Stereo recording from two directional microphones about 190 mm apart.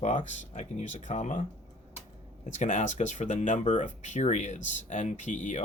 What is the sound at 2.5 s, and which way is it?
Speech, 40° left (ahead or behind).